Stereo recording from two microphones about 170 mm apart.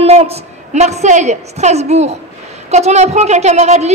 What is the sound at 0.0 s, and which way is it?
A woman's voice, 35° right (ahead or behind).